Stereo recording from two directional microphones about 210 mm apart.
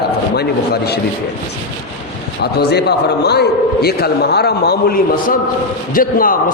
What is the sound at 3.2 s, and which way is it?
Mantra, 50° left (ahead or behind).